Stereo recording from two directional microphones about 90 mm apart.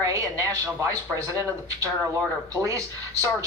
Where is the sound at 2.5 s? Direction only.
35° right (ahead or behind).